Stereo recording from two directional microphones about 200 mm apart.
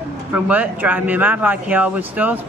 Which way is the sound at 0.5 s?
10° right (ahead or behind).